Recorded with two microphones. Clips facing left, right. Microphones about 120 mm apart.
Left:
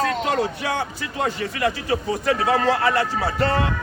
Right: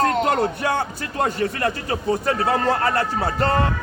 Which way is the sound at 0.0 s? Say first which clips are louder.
Right 3 dB; 50° right (ahead or behind).